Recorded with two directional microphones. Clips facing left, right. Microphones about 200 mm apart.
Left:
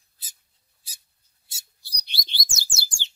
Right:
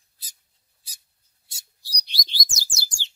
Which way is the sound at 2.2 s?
25° left (ahead or behind).